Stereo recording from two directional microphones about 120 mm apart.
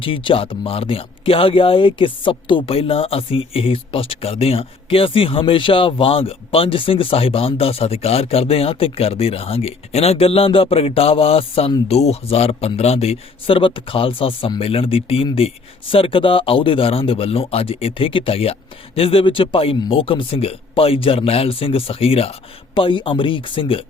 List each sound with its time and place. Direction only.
0.0 s a man's voice: 45° left (ahead or behind)